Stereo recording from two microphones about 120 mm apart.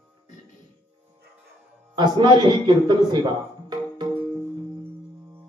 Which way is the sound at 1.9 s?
40° right (ahead or behind).